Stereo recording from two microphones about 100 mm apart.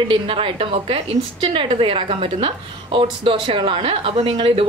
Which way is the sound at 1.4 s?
80° right.